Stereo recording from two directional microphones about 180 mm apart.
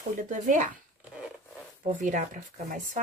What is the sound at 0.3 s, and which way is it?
Speech, 45° right (ahead or behind).